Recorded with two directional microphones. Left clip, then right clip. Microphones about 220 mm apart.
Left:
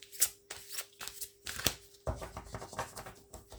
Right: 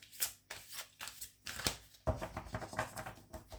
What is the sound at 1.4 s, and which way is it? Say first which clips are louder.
Shuffling cards: left 4 dB; 25° left (ahead or behind).